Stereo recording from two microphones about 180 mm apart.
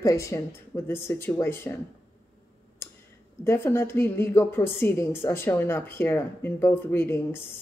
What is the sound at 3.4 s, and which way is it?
A woman's voice, 15° left (ahead or behind).